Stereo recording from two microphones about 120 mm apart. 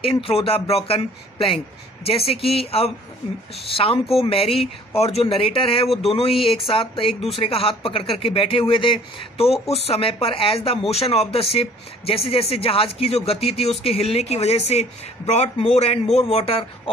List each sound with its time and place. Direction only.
0.0 s a man's voice: 50° left (ahead or behind)